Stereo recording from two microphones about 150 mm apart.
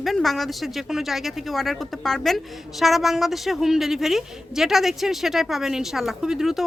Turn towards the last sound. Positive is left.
turn(degrees=-5)  # may be behind; listen again after turning